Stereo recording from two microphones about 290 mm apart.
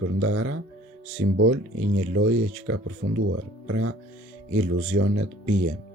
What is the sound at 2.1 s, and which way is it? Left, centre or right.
Speech, right.